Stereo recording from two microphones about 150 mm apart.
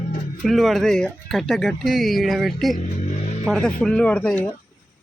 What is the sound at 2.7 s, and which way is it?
Vehicle, 55° left (ahead or behind).